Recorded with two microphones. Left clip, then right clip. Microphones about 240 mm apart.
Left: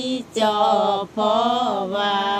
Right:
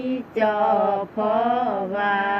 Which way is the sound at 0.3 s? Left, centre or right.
Left.